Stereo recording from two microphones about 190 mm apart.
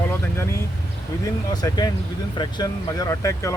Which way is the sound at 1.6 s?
20° left (ahead or behind).